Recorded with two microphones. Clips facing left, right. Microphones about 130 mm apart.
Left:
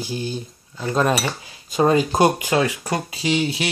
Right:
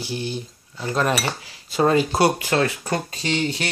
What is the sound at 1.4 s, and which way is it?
Speech, 20° left (ahead or behind).